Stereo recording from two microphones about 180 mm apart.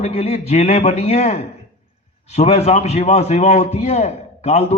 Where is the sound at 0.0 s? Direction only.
35° left (ahead or behind).